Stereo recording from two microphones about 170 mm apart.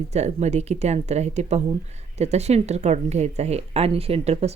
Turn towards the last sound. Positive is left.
turn(degrees=-35)  # may be behind; listen again after turning